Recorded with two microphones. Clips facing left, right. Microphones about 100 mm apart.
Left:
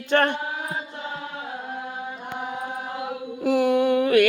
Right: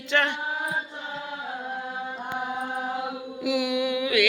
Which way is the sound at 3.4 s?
50° left (ahead or behind).